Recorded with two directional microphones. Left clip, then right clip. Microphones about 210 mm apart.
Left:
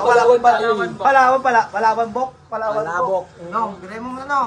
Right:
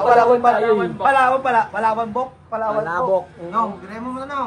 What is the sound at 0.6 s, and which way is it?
Speech, 40° right (ahead or behind).